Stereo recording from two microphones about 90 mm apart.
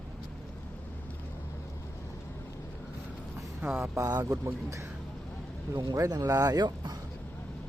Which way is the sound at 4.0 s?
35° right (ahead or behind).